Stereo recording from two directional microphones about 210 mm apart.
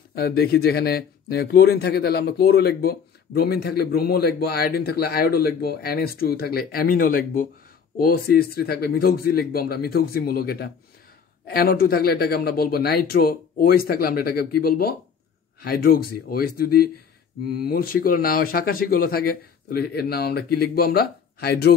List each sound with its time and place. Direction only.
0.1 s speech: 45° left (ahead or behind)